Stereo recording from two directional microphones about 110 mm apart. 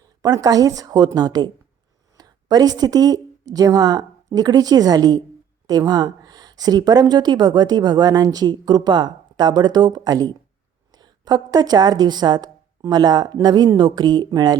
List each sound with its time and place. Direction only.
0.2 s a woman's voice: 35° right (ahead or behind)